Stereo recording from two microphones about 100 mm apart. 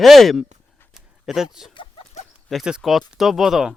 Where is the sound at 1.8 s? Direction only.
75° left (ahead or behind).